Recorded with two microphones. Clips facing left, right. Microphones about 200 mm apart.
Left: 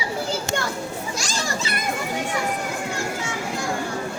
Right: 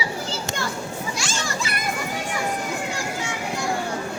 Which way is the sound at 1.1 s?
40° left (ahead or behind).